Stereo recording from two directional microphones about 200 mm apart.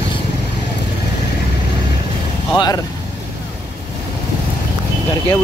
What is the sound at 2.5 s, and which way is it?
Speech, 20° left (ahead or behind).